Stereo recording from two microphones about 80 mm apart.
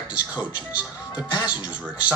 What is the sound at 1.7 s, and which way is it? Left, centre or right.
Speech, centre.